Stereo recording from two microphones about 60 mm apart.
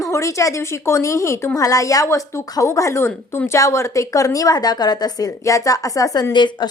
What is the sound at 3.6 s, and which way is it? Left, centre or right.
A woman's voice, left.